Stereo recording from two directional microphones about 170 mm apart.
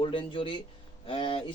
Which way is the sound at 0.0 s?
30° left (ahead or behind).